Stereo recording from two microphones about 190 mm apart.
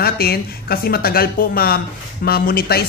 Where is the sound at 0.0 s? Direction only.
55° left (ahead or behind).